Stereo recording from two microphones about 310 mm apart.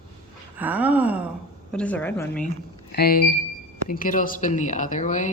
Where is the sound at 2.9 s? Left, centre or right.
Left.